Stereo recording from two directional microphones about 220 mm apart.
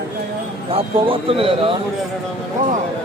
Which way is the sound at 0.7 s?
25° right (ahead or behind).